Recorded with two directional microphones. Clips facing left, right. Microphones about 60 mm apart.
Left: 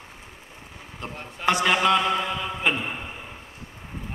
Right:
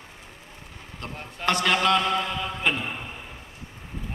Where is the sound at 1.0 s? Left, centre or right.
Centre.